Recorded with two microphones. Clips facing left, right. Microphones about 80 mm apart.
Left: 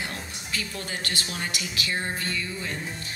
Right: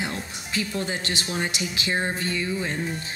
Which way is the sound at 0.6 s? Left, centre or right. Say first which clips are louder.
Right 7 dB; right.